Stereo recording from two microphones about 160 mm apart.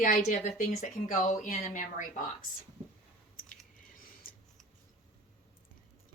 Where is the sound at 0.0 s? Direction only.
55° left (ahead or behind).